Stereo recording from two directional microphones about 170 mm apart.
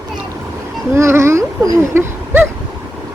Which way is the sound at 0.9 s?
15° right (ahead or behind).